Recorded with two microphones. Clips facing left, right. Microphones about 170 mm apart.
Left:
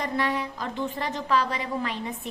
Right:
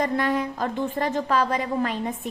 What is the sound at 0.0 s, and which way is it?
A woman's voice, 45° right (ahead or behind).